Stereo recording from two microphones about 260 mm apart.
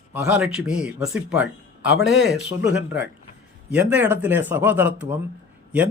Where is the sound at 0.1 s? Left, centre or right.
Centre.